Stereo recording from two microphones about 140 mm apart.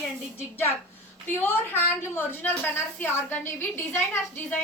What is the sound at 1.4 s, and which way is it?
A woman's voice, 15° left (ahead or behind).